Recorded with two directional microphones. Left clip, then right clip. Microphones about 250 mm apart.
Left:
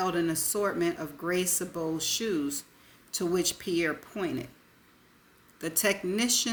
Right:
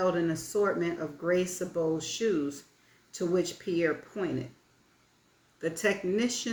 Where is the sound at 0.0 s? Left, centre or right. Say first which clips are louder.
Right 1 dB; left.